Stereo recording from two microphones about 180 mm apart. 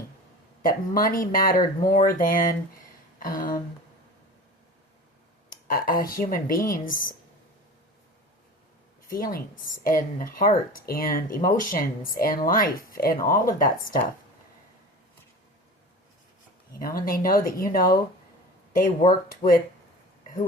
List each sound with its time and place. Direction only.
0.6 s speech: 50° left (ahead or behind)
3.2 s a sound: 50° left (ahead or behind)
5.5 s speech: 50° left (ahead or behind)
9.0 s a woman's voice: 50° left (ahead or behind)
16.8 s speech: 50° left (ahead or behind)